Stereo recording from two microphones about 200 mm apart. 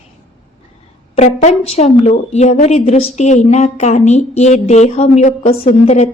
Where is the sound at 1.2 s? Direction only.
35° left (ahead or behind).